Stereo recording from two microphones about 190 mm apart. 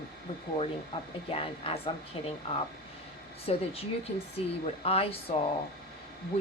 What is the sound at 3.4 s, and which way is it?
Speech, 30° left (ahead or behind).